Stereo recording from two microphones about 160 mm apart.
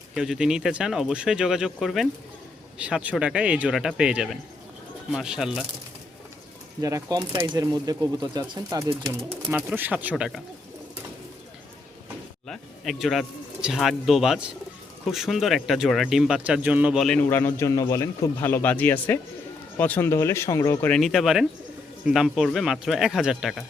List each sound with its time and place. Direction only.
0.1 s speech: 5° right (ahead or behind)
6.8 s speech: 20° right (ahead or behind)
9.5 s speech: 10° right (ahead or behind)
12.5 s speech: centre (ahead or behind); by 20.9 s 20° left (ahead or behind)
20.9 s speech: centre (ahead or behind)